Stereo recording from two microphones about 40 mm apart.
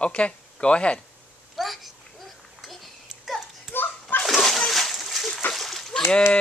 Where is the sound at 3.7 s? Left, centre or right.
Left.